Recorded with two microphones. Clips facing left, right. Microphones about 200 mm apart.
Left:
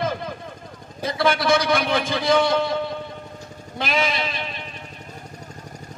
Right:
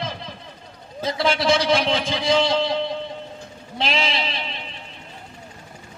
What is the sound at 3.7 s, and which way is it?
Speech, 25° right (ahead or behind).